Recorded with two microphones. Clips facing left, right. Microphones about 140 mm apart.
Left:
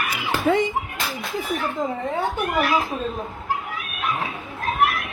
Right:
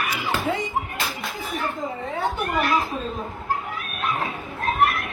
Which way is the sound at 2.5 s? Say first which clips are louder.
Left 1 dB; centre (ahead or behind).